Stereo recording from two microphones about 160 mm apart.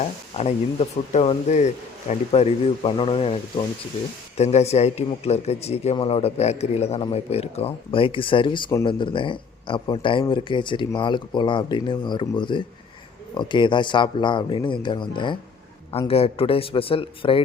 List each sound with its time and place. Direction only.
0.0 s a man's voice: 40° left (ahead or behind)